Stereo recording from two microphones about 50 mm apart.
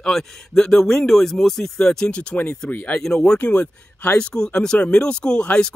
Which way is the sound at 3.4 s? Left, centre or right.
Left.